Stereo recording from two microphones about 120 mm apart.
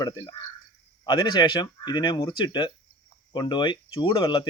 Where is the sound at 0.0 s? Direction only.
35° left (ahead or behind).